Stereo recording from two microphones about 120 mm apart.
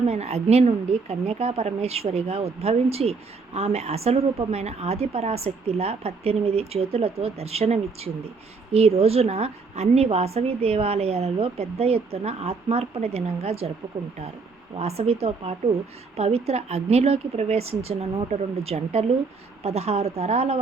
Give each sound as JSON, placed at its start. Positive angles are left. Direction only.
{"t": 0.1, "sound": "a woman's voice", "side_deg": -60}
{"t": 14.8, "sound": "a woman's voice", "side_deg": -60}